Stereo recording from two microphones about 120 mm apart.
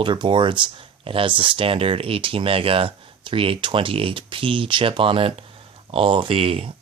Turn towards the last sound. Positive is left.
turn(degrees=-55)  # may be behind; listen again after turning